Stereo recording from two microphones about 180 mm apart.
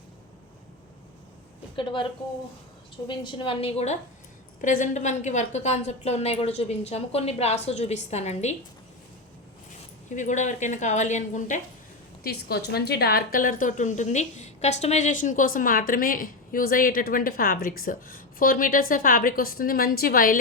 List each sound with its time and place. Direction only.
1.7 s a woman's voice: 30° left (ahead or behind)
3.1 s a woman's voice: 25° left (ahead or behind)
4.6 s a woman's voice: 45° left (ahead or behind)
10.1 s a woman's voice: 45° left (ahead or behind)
12.2 s a woman's voice: 60° left (ahead or behind)